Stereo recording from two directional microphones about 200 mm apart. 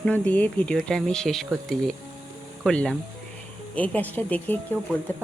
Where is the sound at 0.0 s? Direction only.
5° left (ahead or behind).